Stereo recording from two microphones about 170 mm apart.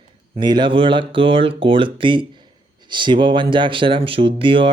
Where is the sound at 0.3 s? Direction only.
25° right (ahead or behind).